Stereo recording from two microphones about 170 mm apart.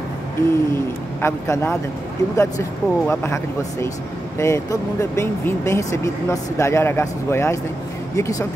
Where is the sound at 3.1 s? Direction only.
15° left (ahead or behind).